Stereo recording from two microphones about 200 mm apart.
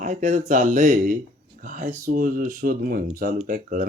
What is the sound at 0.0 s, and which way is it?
Speech, 40° right (ahead or behind).